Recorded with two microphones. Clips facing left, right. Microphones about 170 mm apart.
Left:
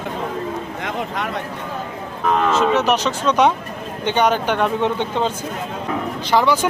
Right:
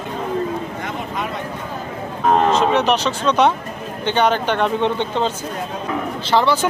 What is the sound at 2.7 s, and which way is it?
Speech, 10° left (ahead or behind).